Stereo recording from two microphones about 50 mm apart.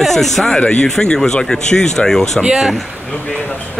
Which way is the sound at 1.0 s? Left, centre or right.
Centre.